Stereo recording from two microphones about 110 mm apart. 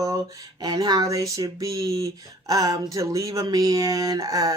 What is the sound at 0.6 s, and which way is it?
Speech, 40° right (ahead or behind).